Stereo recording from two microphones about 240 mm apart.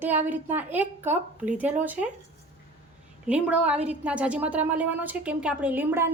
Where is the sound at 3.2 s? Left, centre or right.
Centre.